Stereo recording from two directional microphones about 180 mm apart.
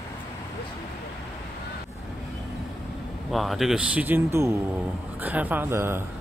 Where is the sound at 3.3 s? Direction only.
Centre (ahead or behind).